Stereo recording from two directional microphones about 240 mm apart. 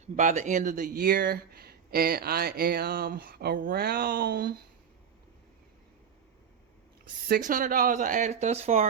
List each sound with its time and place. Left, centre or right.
0.0 s speech: right
7.3 s speech: right